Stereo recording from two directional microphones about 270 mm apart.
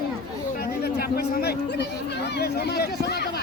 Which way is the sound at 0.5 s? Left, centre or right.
Left.